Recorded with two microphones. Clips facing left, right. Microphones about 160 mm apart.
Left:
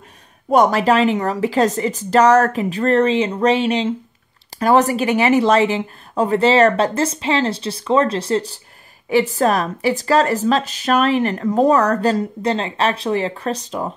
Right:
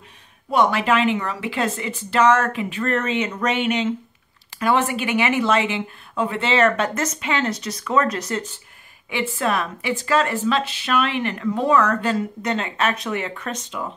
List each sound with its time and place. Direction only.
0.5 s speech: 40° left (ahead or behind)